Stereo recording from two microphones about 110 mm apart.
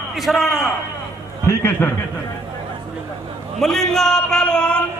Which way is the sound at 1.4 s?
20° left (ahead or behind).